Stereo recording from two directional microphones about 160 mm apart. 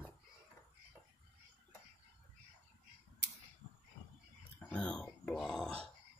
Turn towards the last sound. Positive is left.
turn(degrees=0)  # may be behind; listen again after turning